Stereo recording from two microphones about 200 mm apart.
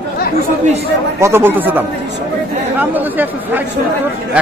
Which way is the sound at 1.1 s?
15° right (ahead or behind).